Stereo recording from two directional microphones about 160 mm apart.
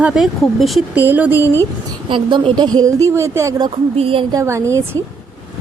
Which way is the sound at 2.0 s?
30° right (ahead or behind).